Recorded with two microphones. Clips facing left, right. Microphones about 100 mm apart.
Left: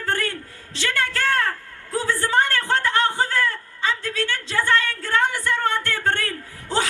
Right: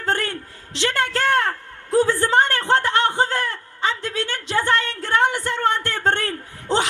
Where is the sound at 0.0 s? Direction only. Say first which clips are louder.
Right 2 dB; 25° right (ahead or behind).